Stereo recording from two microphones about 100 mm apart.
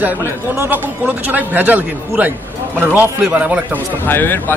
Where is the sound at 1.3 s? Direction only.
15° right (ahead or behind).